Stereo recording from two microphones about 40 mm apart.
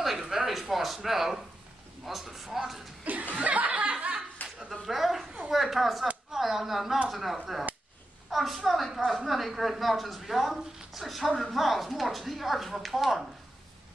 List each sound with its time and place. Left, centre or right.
0.0 s a sound: centre
2.0 s speech: centre
3.0 s chuckle: right
3.4 s laughter: right
4.6 s a sound: centre
5.5 s a woman's voice: centre